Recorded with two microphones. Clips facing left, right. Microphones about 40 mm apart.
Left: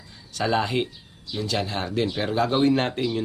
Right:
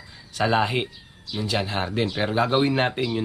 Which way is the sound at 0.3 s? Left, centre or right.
Centre.